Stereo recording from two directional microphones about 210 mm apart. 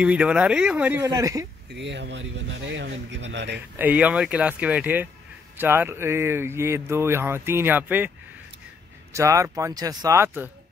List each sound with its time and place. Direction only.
0.0 s speech: 5° right (ahead or behind)
1.7 s speech: 55° right (ahead or behind)
3.7 s speech: 10° right (ahead or behind)
9.1 s speech: 15° right (ahead or behind)